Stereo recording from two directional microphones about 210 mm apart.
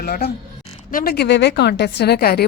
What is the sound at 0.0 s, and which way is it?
A woman's voice, 45° left (ahead or behind).